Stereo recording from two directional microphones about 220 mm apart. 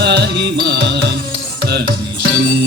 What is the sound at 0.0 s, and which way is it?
Music, 50° right (ahead or behind).